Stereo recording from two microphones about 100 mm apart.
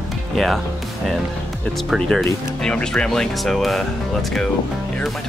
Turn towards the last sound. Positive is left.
turn(degrees=0)  # may be behind; listen again after turning